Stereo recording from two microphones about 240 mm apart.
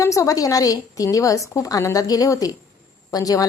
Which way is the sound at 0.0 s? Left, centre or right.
Centre.